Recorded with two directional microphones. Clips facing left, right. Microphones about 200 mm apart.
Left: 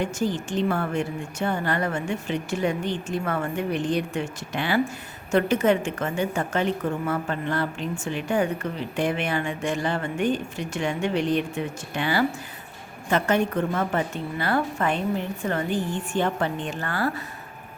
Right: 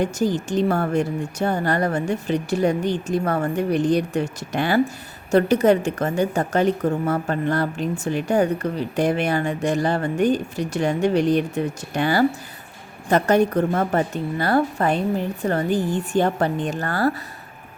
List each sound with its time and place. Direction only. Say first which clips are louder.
0.0 s a woman's voice: right 4 dB; 40° right (ahead or behind)